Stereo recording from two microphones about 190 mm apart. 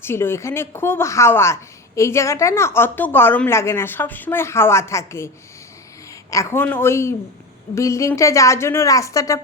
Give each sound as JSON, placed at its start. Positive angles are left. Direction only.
{"t": 0.0, "sound": "a woman's voice", "side_deg": 10}
{"t": 6.3, "sound": "a woman's voice", "side_deg": 15}